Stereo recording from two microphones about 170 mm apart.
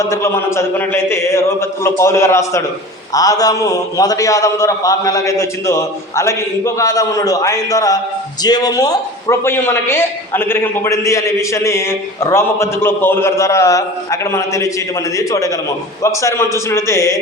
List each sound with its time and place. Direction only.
0.0 s a man's voice: 15° left (ahead or behind)